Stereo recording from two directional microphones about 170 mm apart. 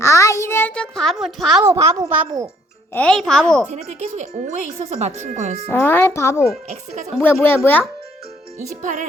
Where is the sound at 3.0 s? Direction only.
5° left (ahead or behind).